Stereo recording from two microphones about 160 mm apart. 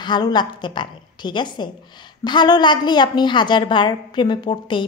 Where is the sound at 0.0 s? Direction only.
25° left (ahead or behind).